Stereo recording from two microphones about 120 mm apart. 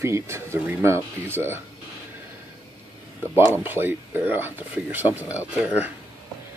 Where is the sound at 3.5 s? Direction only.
15° right (ahead or behind).